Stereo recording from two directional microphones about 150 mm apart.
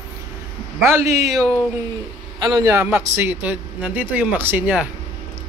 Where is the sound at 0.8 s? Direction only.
15° right (ahead or behind).